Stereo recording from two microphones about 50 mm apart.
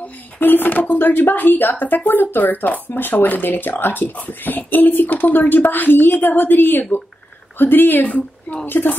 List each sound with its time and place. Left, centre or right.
0.0 s speech: left